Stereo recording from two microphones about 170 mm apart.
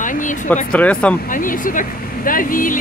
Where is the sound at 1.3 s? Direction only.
55° left (ahead or behind).